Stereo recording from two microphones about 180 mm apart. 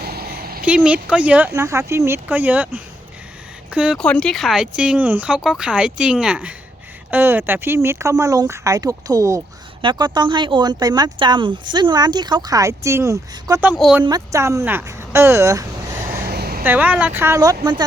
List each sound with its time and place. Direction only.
0.0 s a sound: 60° right (ahead or behind)
0.6 s speech: 5° right (ahead or behind)
4.0 s speech: 5° left (ahead or behind); by 13.7 s 15° right (ahead or behind)
13.7 s speech: 5° right (ahead or behind)
14.0 s speech: 20° right (ahead or behind)
16.2 s vehicle: 60° right (ahead or behind)
16.6 s speech: 10° right (ahead or behind)